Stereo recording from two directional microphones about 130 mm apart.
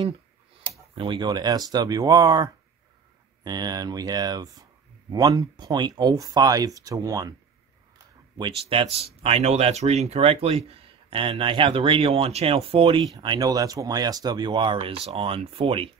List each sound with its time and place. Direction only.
0.9 s speech: 40° right (ahead or behind)
8.4 s speech: 45° right (ahead or behind)